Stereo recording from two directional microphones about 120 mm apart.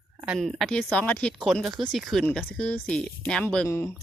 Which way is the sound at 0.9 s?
10° left (ahead or behind).